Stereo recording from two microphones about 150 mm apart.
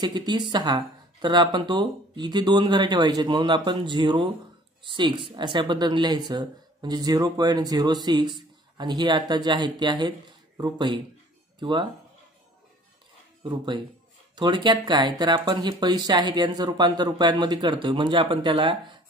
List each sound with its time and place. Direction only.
0.0 s speech: 30° right (ahead or behind)
13.4 s speech: 30° right (ahead or behind)